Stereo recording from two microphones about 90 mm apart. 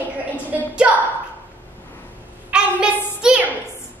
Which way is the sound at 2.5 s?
10° right (ahead or behind).